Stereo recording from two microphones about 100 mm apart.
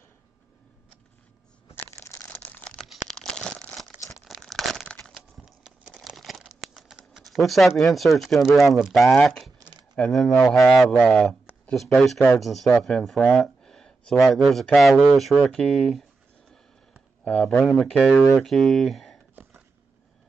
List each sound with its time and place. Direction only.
2.0 s crumpling: 25° left (ahead or behind)
2.4 s a sound: 15° left (ahead or behind)
2.8 s crumpling: 5° left (ahead or behind)
5.4 s a sound: centre (ahead or behind)
10.0 s speech: 10° left (ahead or behind)
17.3 s speech: 10° left (ahead or behind)